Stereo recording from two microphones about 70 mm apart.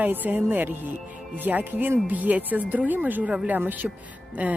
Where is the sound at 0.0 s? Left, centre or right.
Right.